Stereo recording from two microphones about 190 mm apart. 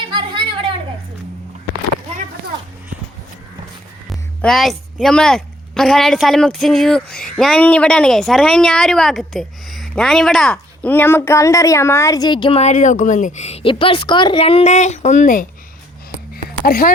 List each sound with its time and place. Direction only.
0.1 s a sound: 25° right (ahead or behind)
4.1 s speech: centre (ahead or behind); by 15.4 s 45° left (ahead or behind)
16.6 s speech: 45° left (ahead or behind)